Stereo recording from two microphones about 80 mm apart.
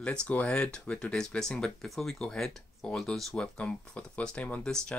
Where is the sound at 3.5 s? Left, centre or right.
Centre.